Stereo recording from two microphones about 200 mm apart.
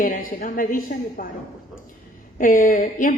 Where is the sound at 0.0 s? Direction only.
45° left (ahead or behind).